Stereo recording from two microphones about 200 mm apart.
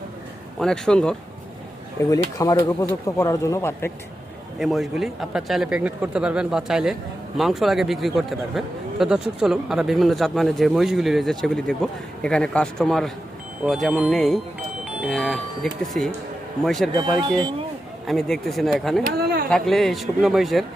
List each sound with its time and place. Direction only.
0.6 s speech: 5° left (ahead or behind)
2.0 s speech: 15° left (ahead or behind)
4.6 s speech: centre (ahead or behind)
16.9 s speech: 20° right (ahead or behind)
18.0 s speech: centre (ahead or behind)